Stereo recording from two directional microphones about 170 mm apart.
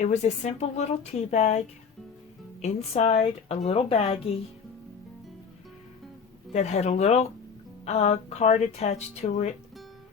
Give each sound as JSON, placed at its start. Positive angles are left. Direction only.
{"t": 0.0, "sound": "speech", "side_deg": 45}
{"t": 6.5, "sound": "speech", "side_deg": 40}